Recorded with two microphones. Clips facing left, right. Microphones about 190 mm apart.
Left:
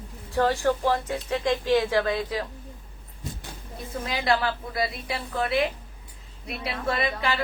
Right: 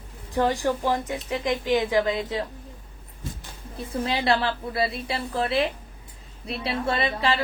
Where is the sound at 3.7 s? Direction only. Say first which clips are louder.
Right 4 dB; 30° right (ahead or behind).